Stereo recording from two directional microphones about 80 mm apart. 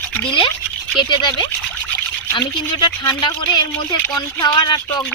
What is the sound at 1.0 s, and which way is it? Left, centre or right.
Speech, left.